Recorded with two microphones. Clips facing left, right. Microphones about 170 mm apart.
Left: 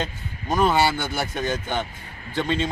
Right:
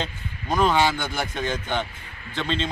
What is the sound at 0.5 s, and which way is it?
A man's voice, 5° left (ahead or behind).